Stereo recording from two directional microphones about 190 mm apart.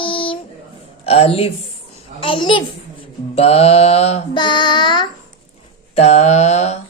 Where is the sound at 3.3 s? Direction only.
35° left (ahead or behind).